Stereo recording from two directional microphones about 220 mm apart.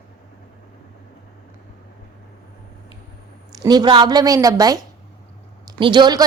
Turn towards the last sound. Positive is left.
turn(degrees=-20)  # may be behind; listen again after turning